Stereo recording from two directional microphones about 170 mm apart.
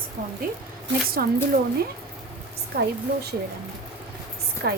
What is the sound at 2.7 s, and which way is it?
Speech, 70° right (ahead or behind).